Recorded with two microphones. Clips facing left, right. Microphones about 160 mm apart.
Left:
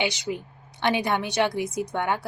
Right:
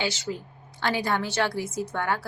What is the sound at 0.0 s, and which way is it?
A woman's voice, 15° left (ahead or behind).